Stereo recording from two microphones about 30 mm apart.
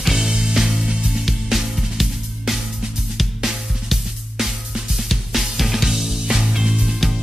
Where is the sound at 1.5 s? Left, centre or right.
Centre.